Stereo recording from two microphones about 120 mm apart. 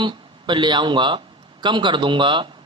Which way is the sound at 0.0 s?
40° right (ahead or behind).